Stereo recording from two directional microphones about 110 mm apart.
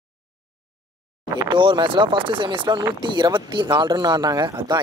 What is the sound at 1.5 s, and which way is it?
Speech, 45° right (ahead or behind).